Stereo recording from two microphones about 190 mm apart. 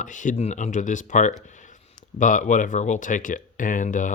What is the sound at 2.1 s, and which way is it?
Speech, 40° left (ahead or behind).